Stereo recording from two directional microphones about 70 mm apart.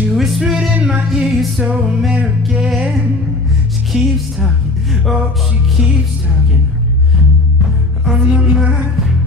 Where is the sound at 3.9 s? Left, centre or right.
Centre.